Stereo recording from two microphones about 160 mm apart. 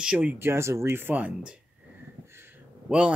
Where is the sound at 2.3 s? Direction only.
15° right (ahead or behind).